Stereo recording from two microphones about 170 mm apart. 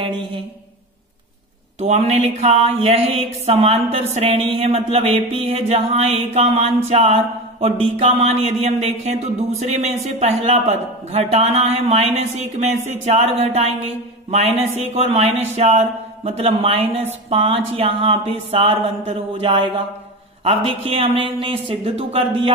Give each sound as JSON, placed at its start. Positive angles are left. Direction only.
{"t": 0.0, "sound": "speech", "side_deg": -30}
{"t": 1.8, "sound": "speech", "side_deg": -40}